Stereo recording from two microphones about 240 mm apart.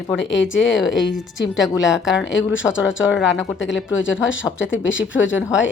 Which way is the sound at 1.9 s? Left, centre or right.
Centre.